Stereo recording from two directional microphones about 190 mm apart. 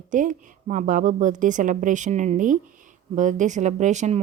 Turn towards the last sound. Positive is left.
turn(degrees=-35)  # may be behind; listen again after turning